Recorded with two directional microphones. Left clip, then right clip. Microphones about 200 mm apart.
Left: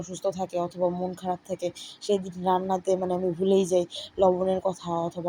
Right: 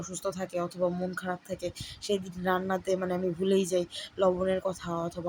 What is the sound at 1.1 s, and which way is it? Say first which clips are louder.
Speech: left 4 dB; centre (ahead or behind).